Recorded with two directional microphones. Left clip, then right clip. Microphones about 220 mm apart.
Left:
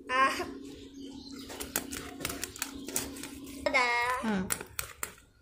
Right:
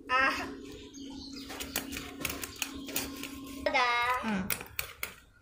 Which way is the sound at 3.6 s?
55° left (ahead or behind).